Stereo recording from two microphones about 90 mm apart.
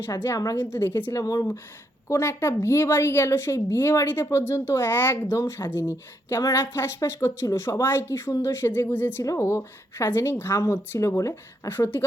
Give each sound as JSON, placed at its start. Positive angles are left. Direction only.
{"t": 0.5, "sound": "a woman's voice", "side_deg": 25}
{"t": 1.1, "sound": "a woman's voice", "side_deg": 40}
{"t": 9.2, "sound": "a woman's voice", "side_deg": 35}